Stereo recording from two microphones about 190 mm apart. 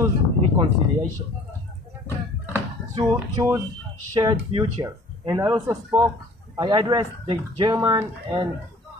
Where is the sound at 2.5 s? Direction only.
10° right (ahead or behind).